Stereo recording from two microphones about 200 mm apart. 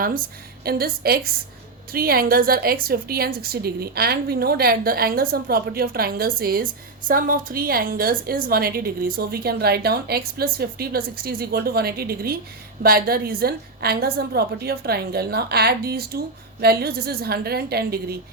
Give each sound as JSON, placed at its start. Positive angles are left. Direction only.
{"t": 0.6, "sound": "a woman's voice", "side_deg": -50}